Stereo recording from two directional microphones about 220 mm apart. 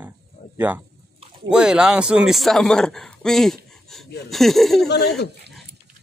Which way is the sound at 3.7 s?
Centre (ahead or behind).